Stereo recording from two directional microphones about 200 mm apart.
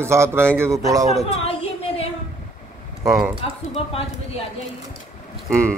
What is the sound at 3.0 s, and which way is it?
Speech, 15° right (ahead or behind).